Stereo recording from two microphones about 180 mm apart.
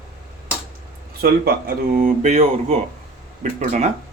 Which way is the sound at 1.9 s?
45° right (ahead or behind).